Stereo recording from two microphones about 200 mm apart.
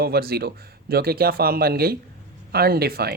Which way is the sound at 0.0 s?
50° right (ahead or behind).